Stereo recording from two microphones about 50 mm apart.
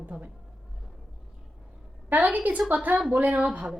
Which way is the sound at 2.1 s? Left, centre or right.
Right.